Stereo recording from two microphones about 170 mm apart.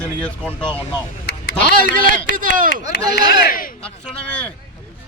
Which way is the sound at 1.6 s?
55° right (ahead or behind).